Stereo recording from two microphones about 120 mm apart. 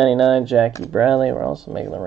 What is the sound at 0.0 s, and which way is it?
Speech, centre (ahead or behind).